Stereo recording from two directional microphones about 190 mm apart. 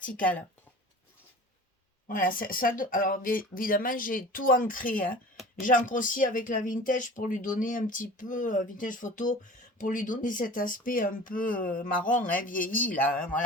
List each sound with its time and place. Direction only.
2.0 s speech: 45° left (ahead or behind)